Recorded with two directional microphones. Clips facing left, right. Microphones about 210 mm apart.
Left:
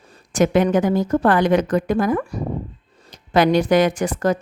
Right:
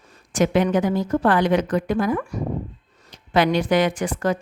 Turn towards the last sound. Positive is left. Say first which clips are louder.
# left 3 dB
turn(degrees=40)  # may be behind; listen again after turning